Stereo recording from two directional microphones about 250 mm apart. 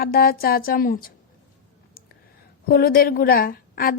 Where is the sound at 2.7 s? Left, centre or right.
Left.